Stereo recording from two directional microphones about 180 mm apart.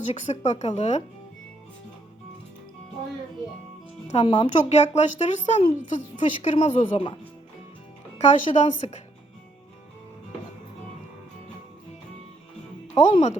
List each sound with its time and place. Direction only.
0.1 s a woman's voice: 40° left (ahead or behind)
4.1 s a woman's voice: 35° left (ahead or behind)
8.2 s a woman's voice: 40° left (ahead or behind)
12.9 s speech: 40° left (ahead or behind)